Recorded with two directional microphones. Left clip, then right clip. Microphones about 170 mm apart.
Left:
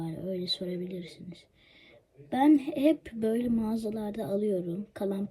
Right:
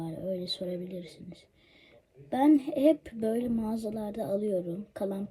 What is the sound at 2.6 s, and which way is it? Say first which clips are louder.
Speech: right 2 dB; 30° left (ahead or behind).